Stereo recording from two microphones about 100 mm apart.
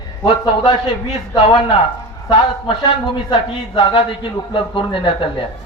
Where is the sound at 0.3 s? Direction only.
60° left (ahead or behind).